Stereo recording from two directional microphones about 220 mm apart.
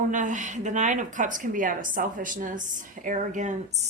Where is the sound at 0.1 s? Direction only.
35° right (ahead or behind).